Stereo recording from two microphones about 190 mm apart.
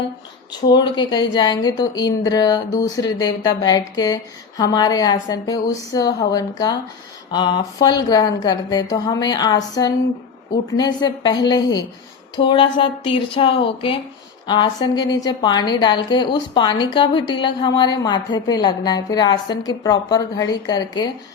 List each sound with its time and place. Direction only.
0.7 s a woman's voice: 20° left (ahead or behind)